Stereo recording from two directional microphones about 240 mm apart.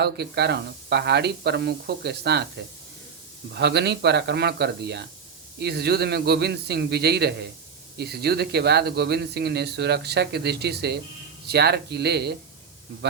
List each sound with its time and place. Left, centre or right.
0.0 s speech: right
3.5 s speech: right